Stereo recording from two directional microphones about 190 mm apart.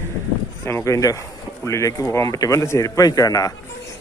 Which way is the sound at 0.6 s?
15° left (ahead or behind).